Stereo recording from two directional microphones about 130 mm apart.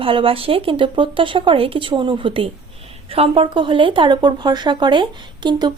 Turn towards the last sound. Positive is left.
turn(degrees=-35)  # may be behind; listen again after turning